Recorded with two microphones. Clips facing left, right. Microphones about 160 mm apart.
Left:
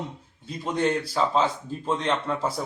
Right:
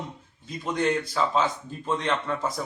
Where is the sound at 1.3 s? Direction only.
30° left (ahead or behind).